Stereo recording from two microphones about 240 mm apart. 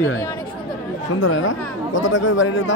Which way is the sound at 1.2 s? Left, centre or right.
Left.